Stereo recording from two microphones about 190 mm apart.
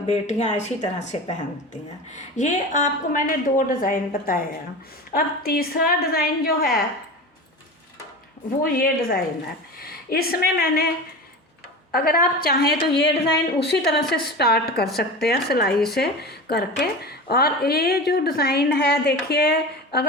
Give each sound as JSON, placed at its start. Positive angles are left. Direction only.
{"t": 0.1, "sound": "a woman's voice", "side_deg": 35}
{"t": 8.7, "sound": "a woman's voice", "side_deg": 50}
{"t": 11.9, "sound": "a woman's voice", "side_deg": 50}